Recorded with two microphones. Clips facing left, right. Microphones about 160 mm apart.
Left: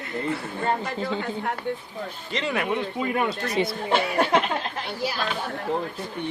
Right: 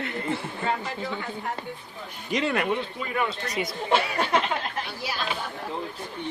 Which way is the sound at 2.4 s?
Centre (ahead or behind).